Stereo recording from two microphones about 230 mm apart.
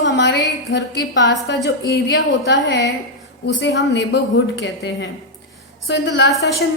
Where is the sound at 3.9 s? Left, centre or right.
Left.